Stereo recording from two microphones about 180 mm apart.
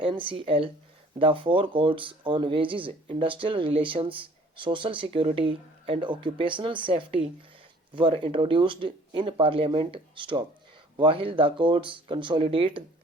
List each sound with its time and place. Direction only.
0.0 s speech: 30° right (ahead or behind)